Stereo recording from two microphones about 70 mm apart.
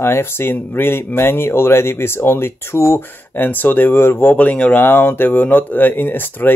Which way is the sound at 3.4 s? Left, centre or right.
Left.